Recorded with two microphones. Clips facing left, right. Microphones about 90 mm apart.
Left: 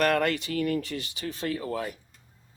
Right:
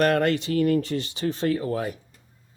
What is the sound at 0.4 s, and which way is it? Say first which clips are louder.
Speech: right 6 dB; 35° right (ahead or behind).